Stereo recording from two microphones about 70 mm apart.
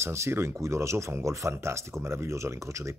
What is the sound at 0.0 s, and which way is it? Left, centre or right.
Speech, right.